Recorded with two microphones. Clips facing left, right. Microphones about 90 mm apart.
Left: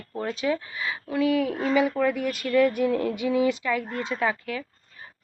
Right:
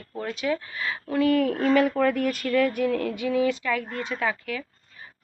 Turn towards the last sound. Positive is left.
turn(degrees=25)  # may be behind; listen again after turning